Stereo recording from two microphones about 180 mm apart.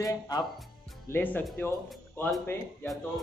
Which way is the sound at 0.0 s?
20° left (ahead or behind).